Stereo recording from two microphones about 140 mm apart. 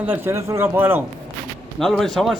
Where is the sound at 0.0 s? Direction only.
15° right (ahead or behind).